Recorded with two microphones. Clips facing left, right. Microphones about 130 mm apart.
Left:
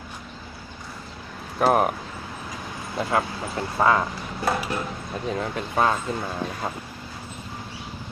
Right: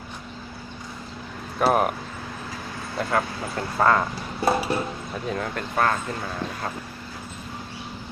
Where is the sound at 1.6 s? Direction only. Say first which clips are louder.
Left 1 dB; centre (ahead or behind).